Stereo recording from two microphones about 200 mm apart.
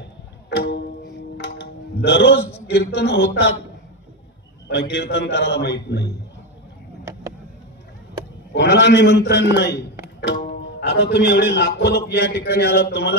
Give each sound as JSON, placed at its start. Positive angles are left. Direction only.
{"t": 0.5, "sound": "music", "side_deg": 60}
{"t": 1.4, "sound": "a man's voice", "side_deg": 60}
{"t": 4.6, "sound": "a man's voice", "side_deg": 60}
{"t": 8.5, "sound": "a man's voice", "side_deg": 60}
{"t": 10.8, "sound": "a man's voice", "side_deg": 55}